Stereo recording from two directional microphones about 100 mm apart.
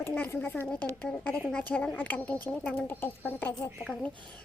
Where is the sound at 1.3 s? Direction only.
10° left (ahead or behind).